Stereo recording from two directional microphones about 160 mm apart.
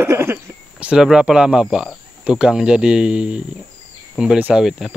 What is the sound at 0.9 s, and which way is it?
Speech, 5° right (ahead or behind).